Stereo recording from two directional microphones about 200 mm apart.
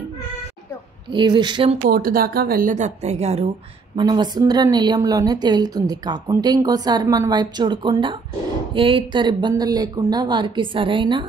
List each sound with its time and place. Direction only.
1.1 s speech: 20° right (ahead or behind)
1.8 s a woman's voice: 45° right (ahead or behind)
3.9 s speech: 20° right (ahead or behind)